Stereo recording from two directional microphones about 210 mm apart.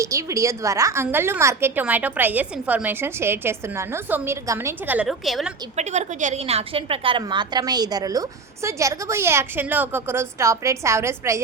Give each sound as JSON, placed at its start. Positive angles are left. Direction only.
{"t": 0.0, "sound": "a woman's voice", "side_deg": -15}
{"t": 5.7, "sound": "a woman's voice", "side_deg": -35}